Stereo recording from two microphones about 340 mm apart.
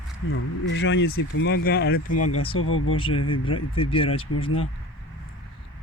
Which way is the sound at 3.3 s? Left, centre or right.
Centre.